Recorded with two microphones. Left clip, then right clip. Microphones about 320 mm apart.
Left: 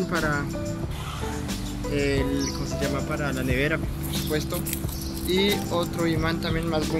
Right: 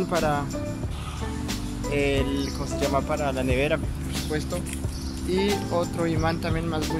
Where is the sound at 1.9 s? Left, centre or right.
Centre.